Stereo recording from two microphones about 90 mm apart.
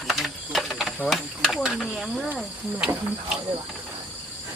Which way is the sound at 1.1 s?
Centre (ahead or behind).